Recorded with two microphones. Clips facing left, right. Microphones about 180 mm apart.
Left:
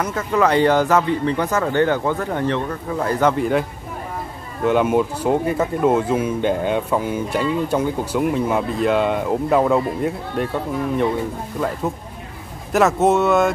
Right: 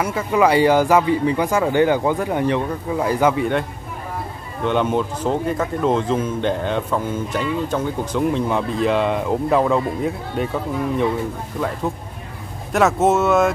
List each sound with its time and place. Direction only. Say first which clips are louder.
0.0 s speech: right 1 dB; 10° right (ahead or behind)
4.6 s speech: left 3 dB; 5° left (ahead or behind)
12.7 s speech: left 1 dB; centre (ahead or behind)